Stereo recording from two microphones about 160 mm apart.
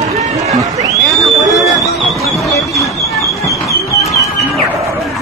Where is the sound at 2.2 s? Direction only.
Centre (ahead or behind).